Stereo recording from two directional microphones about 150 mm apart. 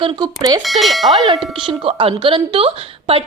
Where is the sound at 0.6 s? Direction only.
Centre (ahead or behind).